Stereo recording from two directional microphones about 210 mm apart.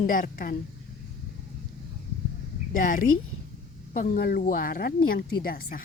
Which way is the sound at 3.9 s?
40° left (ahead or behind).